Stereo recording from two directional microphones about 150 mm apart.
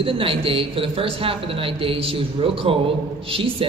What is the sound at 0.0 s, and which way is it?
A man's voice, 35° right (ahead or behind).